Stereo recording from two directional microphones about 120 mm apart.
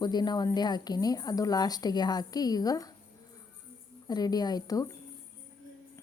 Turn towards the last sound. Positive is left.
turn(degrees=30)  # may be behind; listen again after turning